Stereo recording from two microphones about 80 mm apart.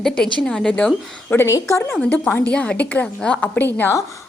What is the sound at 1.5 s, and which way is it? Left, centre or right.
Speech, left.